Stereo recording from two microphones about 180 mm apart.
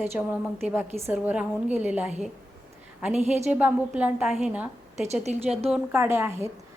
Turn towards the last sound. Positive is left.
turn(degrees=-15)  # may be behind; listen again after turning